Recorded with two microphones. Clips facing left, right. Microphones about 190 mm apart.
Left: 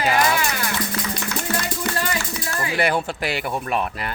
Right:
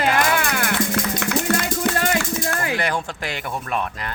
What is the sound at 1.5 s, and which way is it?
Music, 60° right (ahead or behind).